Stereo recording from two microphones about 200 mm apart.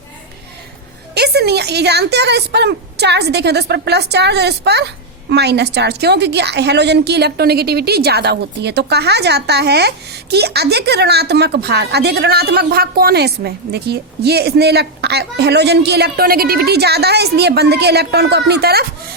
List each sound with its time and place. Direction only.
1.1 s a woman's voice: 55° right (ahead or behind)